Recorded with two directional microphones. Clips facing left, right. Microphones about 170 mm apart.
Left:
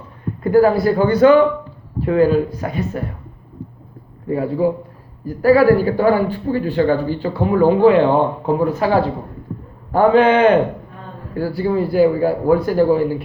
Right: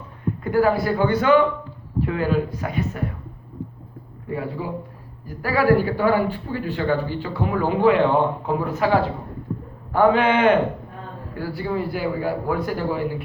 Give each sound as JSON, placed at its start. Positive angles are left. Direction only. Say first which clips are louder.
{"t": 0.4, "sound": "speech", "louder": "left 6 dB", "side_deg": 35}
{"t": 4.3, "sound": "speech", "louder": "left 10 dB", "side_deg": 35}